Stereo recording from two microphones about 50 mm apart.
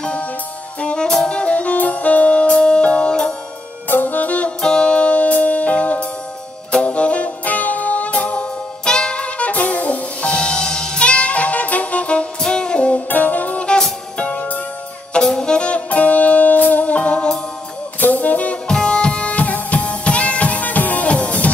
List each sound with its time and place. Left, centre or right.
0.7 s saxophone: centre
2.5 s music: centre
3.9 s saxophone: left
4.6 s music: centre
8.8 s saxophone: centre
10.2 s saxophone: centre
12.4 s music: centre
13.1 s music: left
18.0 s brass instrument: left
18.7 s music: centre